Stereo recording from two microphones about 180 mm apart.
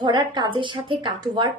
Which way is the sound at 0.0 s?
25° right (ahead or behind).